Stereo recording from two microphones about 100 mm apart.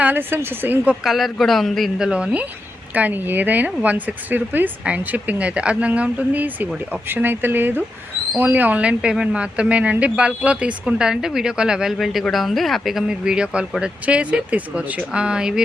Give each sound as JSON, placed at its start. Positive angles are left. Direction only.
{"t": 0.0, "sound": "speech", "side_deg": -20}
{"t": 1.0, "sound": "a woman's voice", "side_deg": 0}